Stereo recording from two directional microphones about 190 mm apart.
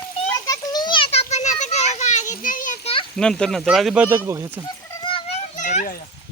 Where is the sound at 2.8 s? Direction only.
30° left (ahead or behind).